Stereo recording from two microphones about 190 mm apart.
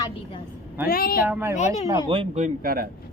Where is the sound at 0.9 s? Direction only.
50° left (ahead or behind).